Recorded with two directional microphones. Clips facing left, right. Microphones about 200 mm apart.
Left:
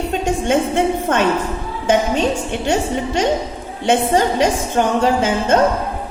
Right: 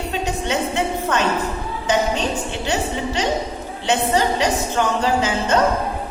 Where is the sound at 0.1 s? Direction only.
50° left (ahead or behind).